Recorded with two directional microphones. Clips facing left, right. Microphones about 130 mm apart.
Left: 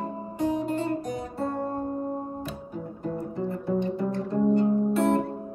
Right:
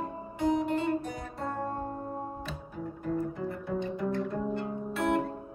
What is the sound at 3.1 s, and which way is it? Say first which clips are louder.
Music: left 2 dB; 30° left (ahead or behind).